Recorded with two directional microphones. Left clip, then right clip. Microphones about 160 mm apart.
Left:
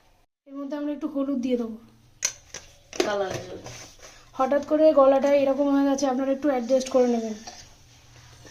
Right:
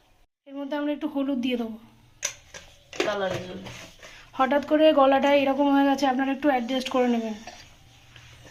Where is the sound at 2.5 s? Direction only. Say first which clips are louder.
Left 1 dB; 90° left.